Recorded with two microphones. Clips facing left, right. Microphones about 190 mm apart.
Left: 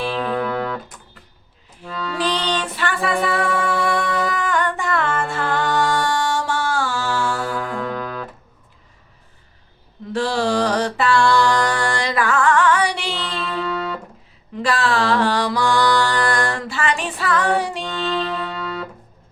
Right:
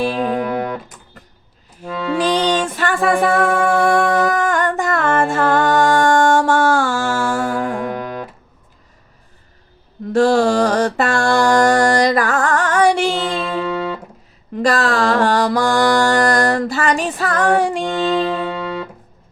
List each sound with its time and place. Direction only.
0.0 s music: 40° right (ahead or behind)
0.3 s music: 15° right (ahead or behind)
1.2 s a sound: 40° right (ahead or behind)
1.8 s music: 45° right (ahead or behind)
10.1 s mantra: 45° right (ahead or behind)
13.3 s music: 15° right (ahead or behind)
14.5 s mantra: 45° right (ahead or behind)
18.0 s music: 15° right (ahead or behind)